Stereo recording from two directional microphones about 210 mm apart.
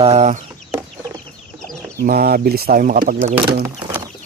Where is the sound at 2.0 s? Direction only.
45° right (ahead or behind).